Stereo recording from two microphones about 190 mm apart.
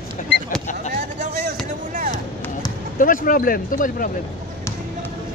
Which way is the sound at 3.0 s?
45° left (ahead or behind).